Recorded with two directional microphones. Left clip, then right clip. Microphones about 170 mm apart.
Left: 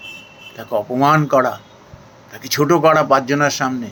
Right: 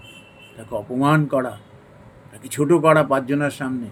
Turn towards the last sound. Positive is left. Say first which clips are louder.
# left 6 dB
turn(degrees=-15)  # may be behind; listen again after turning